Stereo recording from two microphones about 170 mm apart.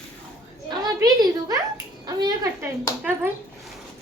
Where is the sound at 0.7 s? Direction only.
25° right (ahead or behind).